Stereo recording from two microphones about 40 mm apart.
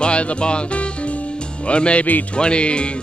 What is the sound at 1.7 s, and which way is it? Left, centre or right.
Music, left.